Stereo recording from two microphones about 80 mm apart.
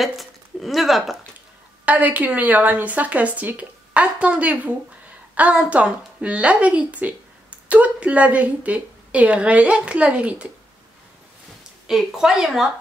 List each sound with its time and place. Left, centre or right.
0.0 s a sound: centre
1.9 s a woman's voice: centre
11.9 s a woman's voice: centre